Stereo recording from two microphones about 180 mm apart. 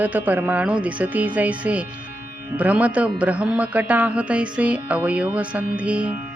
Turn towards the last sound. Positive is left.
turn(degrees=-5)  # may be behind; listen again after turning